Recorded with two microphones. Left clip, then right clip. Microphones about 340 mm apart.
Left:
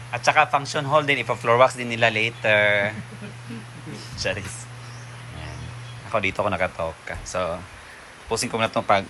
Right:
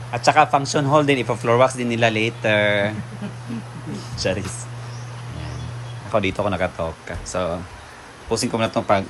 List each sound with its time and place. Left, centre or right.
0.1 s speech: centre
4.2 s speech: centre
6.1 s speech: centre